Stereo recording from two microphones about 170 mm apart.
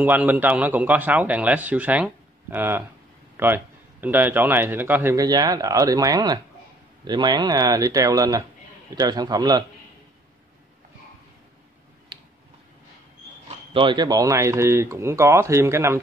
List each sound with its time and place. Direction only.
0.0 s speech: 10° right (ahead or behind)
12.1 s tick-tock: 30° right (ahead or behind)
13.7 s speech: 25° right (ahead or behind)